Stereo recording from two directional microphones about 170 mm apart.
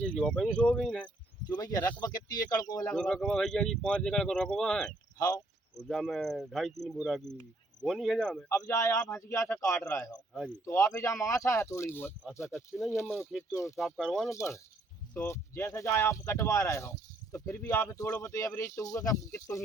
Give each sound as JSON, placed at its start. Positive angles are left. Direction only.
{"t": 0.0, "sound": "speech", "side_deg": 5}
{"t": 1.5, "sound": "speech", "side_deg": 20}
{"t": 2.9, "sound": "speech", "side_deg": 5}
{"t": 5.1, "sound": "cricket", "side_deg": 20}
{"t": 5.9, "sound": "speech", "side_deg": 0}
{"t": 8.5, "sound": "speech", "side_deg": 15}
{"t": 13.7, "sound": "speech", "side_deg": 0}
{"t": 14.3, "sound": "speech", "side_deg": 15}